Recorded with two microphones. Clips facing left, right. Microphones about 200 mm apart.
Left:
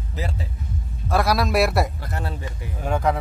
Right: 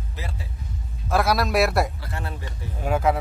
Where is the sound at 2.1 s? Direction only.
35° left (ahead or behind).